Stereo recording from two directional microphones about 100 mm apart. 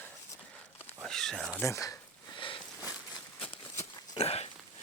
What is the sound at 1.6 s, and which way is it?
Speech, 35° left (ahead or behind).